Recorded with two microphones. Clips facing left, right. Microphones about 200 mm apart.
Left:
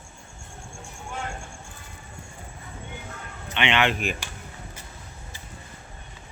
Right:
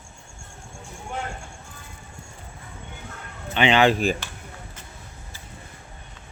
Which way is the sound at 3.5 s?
35° right (ahead or behind).